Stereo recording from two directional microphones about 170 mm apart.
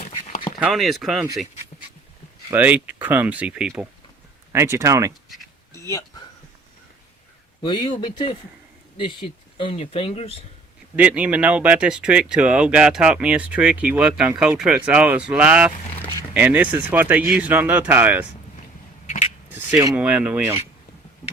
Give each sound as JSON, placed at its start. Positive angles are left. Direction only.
{"t": 0.6, "sound": "speech", "side_deg": 0}
{"t": 2.5, "sound": "speech", "side_deg": -10}
{"t": 4.5, "sound": "speech", "side_deg": -15}
{"t": 5.7, "sound": "a sound", "side_deg": 20}
{"t": 7.6, "sound": "speech", "side_deg": 25}
{"t": 9.6, "sound": "speech", "side_deg": 35}
{"t": 10.9, "sound": "speech", "side_deg": -10}
{"t": 19.0, "sound": "a sound", "side_deg": 45}
{"t": 19.5, "sound": "speech", "side_deg": -10}